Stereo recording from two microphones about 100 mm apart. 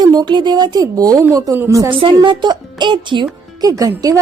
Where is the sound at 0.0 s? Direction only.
45° right (ahead or behind).